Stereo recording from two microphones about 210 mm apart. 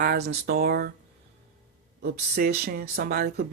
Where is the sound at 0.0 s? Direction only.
45° right (ahead or behind).